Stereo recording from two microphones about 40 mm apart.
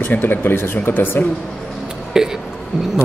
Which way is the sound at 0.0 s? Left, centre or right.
Left.